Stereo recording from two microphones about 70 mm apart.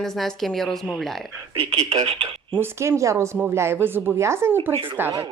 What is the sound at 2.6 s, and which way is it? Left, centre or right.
Speech, right.